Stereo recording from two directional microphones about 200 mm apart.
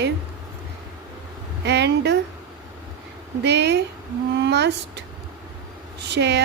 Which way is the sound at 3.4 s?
55° right (ahead or behind).